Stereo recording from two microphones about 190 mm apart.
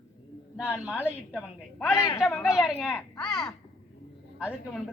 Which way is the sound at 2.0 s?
20° left (ahead or behind).